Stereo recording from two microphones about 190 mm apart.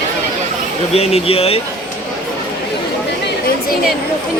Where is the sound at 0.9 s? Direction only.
35° left (ahead or behind).